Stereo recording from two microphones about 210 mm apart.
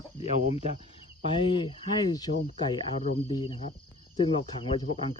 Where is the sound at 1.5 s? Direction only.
20° left (ahead or behind).